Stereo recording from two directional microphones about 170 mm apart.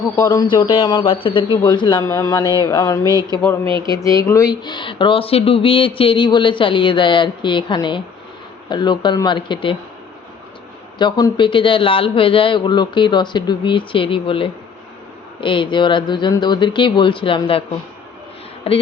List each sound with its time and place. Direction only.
0.2 s speech: 20° left (ahead or behind)
3.0 s speech: 20° right (ahead or behind)
3.8 s speech: 20° left (ahead or behind)
10.9 s speech: 25° left (ahead or behind)
18.7 s speech: 35° left (ahead or behind)